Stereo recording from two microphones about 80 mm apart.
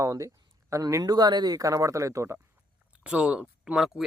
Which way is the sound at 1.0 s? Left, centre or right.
Right.